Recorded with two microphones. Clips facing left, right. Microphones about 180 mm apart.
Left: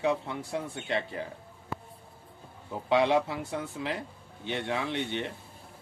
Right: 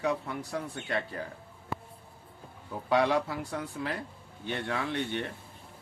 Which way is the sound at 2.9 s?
25° left (ahead or behind).